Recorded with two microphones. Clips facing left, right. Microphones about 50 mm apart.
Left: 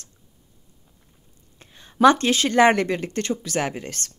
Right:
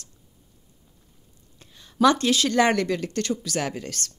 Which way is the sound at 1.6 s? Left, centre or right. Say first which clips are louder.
Left 4 dB; left.